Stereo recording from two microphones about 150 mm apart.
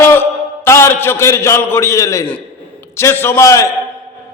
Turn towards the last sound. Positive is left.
turn(degrees=20)  # may be behind; listen again after turning